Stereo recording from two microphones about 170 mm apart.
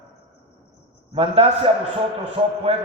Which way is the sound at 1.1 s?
35° right (ahead or behind).